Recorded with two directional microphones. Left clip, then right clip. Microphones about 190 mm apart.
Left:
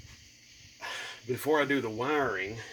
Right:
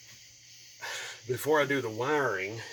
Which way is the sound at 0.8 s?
20° left (ahead or behind).